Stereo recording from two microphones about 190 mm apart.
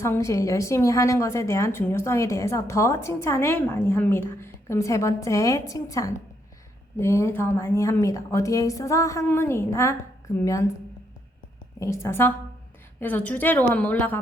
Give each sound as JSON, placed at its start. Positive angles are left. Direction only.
{"t": 0.0, "sound": "a woman's voice", "side_deg": 15}
{"t": 11.8, "sound": "a woman's voice", "side_deg": 15}